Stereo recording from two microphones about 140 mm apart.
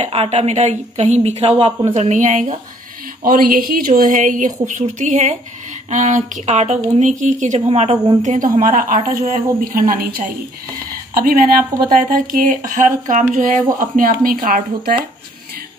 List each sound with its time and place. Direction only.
0.0 s a woman's voice: 45° right (ahead or behind); by 2.5 s 60° right (ahead or behind)
3.3 s a woman's voice: 85° right; by 8.0 s 50° right (ahead or behind)
8.2 s speech: 65° right (ahead or behind); by 11.6 s 90° right
11.9 s speech: 70° right (ahead or behind)